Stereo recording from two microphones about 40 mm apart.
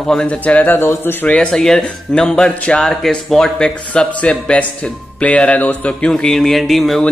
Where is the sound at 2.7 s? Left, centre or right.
Centre.